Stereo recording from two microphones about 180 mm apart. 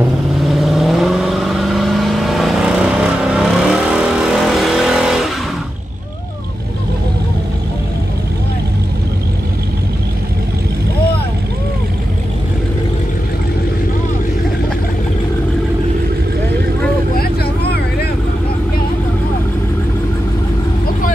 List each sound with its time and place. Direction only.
0.5 s vehicle: centre (ahead or behind)
17.1 s vehicle: 60° left (ahead or behind)